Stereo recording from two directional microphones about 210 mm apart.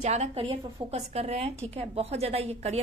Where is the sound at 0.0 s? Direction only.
30° right (ahead or behind).